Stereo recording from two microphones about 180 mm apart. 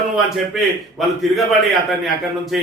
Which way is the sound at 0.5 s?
Centre (ahead or behind).